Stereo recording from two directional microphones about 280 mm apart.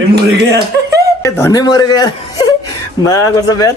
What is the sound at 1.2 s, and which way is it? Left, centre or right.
Speech, centre.